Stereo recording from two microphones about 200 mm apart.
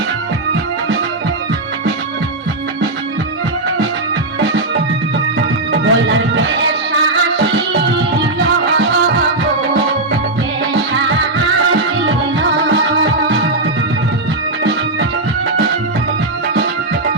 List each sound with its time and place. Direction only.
5.8 s music: 65° right (ahead or behind)
12.0 s music: 70° right (ahead or behind)